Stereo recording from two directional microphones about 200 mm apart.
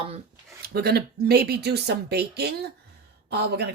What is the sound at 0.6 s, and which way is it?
Speech, 50° right (ahead or behind).